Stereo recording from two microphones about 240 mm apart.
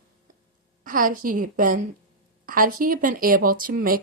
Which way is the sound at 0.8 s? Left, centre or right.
Right.